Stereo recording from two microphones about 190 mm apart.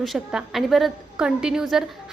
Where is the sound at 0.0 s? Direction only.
Centre (ahead or behind).